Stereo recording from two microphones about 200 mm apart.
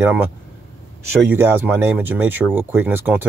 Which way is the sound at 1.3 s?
10° right (ahead or behind).